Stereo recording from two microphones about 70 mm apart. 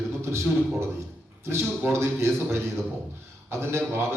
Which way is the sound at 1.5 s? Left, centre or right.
Right.